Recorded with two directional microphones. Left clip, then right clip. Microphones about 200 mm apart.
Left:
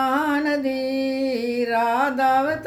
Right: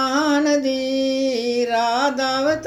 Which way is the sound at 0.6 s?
45° left (ahead or behind).